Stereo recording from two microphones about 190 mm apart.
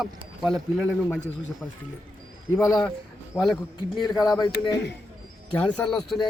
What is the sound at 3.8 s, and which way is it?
Speech, 25° left (ahead or behind).